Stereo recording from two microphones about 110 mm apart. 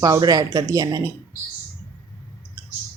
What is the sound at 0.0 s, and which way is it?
A woman's voice, 35° right (ahead or behind).